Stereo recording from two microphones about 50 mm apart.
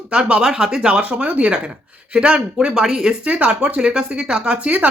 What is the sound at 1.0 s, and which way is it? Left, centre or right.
Speech, right.